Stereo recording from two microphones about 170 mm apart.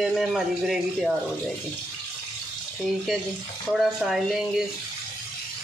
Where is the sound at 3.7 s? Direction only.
Centre (ahead or behind).